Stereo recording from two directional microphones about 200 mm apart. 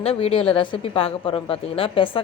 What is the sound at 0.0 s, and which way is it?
Speech, 30° left (ahead or behind).